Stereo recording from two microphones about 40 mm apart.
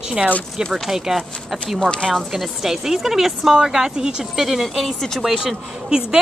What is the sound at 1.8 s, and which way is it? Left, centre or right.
Speech, left.